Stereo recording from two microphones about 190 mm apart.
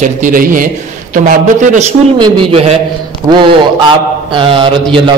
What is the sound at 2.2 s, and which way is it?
Mantra, 30° right (ahead or behind).